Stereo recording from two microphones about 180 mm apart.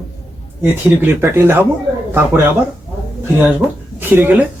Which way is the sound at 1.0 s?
10° right (ahead or behind).